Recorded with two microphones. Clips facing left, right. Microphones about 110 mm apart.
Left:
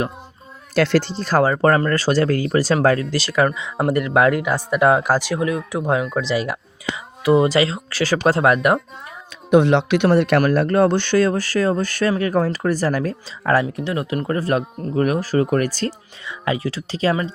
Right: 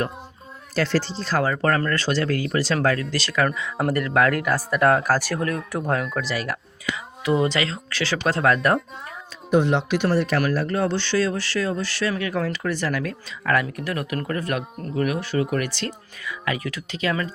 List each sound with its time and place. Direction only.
0.8 s speech: 60° left (ahead or behind)
1.2 s speech: 45° left (ahead or behind)
1.5 s speech: 30° left (ahead or behind)
4.7 s speech: 10° left (ahead or behind)
6.2 s speech: 25° left (ahead or behind); by 8.4 s 40° left (ahead or behind)
8.5 s speech: 5° left (ahead or behind)
9.5 s speech: 70° left (ahead or behind); by 12.1 s 45° left (ahead or behind)
12.1 s speech: 35° left (ahead or behind)
16.2 s speech: 25° left (ahead or behind)